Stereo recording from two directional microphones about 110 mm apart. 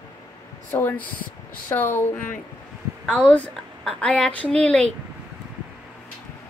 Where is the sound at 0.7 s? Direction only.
20° left (ahead or behind).